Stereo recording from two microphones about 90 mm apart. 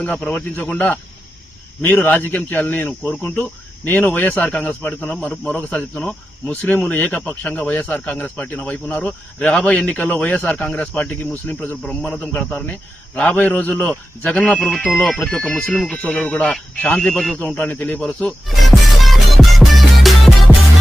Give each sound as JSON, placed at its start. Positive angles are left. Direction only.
{"t": 0.0, "sound": "a man's voice", "side_deg": 15}
{"t": 16.0, "sound": "a man's voice", "side_deg": 20}
{"t": 18.4, "sound": "music", "side_deg": 0}